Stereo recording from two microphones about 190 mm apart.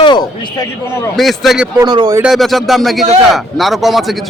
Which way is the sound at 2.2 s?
Centre (ahead or behind).